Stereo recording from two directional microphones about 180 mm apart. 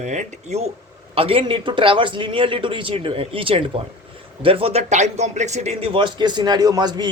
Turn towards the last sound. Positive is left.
turn(degrees=-25)  # may be behind; listen again after turning